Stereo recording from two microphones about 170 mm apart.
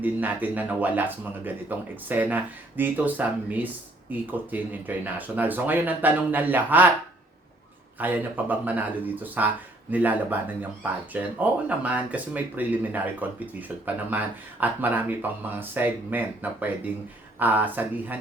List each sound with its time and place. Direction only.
0.0 s speech: 10° right (ahead or behind)
7.9 s speech: 10° right (ahead or behind)